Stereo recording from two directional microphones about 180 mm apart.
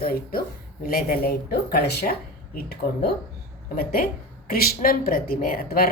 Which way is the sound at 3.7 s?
55° left (ahead or behind).